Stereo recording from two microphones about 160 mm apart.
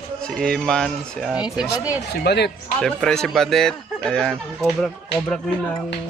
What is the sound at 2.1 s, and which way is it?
Speech, 90° left.